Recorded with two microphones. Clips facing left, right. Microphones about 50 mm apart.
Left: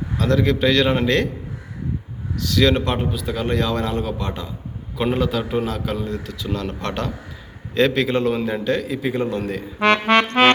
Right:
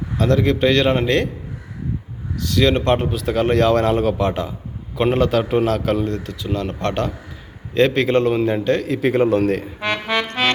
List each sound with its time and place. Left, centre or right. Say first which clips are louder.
0.3 s a man's voice: even; right
2.6 s a man's voice: right 1 dB; right
2.8 s a man's voice: right 5 dB; right
4.9 s a man's voice: right 4 dB; right
6.4 s a man's voice: right 4 dB; right
8.6 s a man's voice: right 4 dB; right
9.8 s music: left 7 dB; left
10.2 s music: left 5 dB; left